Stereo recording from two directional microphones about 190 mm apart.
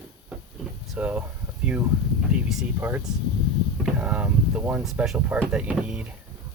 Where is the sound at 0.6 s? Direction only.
Centre (ahead or behind).